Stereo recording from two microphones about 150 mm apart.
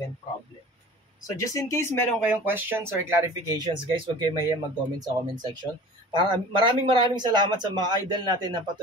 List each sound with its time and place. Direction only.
1.3 s speech: 20° left (ahead or behind)
2.1 s speech: 10° right (ahead or behind)
3.5 s a man's voice: 30° right (ahead or behind)